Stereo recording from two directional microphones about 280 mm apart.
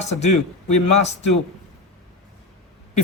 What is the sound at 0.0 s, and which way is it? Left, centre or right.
Speech, left.